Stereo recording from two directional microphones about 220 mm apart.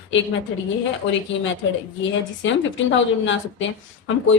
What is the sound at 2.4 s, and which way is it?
A woman's voice, 60° left (ahead or behind).